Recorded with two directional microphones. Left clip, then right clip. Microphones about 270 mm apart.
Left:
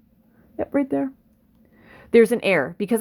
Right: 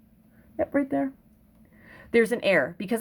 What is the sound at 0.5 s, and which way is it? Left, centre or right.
A woman's voice, centre.